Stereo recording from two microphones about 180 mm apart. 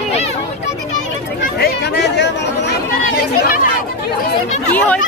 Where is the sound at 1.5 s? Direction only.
65° left (ahead or behind).